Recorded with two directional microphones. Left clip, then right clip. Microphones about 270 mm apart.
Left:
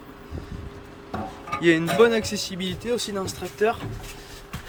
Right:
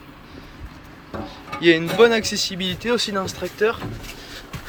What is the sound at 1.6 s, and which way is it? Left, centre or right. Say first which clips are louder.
Speech: right 3 dB; centre.